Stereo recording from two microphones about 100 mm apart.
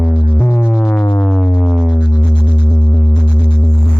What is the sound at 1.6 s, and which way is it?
Music, centre (ahead or behind).